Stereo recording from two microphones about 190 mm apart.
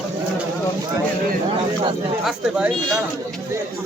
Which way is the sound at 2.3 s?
5° right (ahead or behind).